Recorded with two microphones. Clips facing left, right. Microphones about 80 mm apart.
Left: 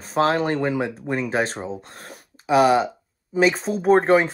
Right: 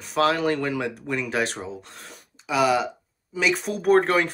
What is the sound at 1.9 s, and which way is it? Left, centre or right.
Speech, left.